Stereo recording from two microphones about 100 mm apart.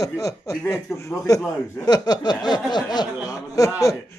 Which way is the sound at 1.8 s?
40° left (ahead or behind).